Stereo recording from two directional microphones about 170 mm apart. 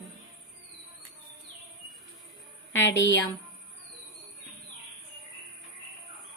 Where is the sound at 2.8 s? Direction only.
90° left.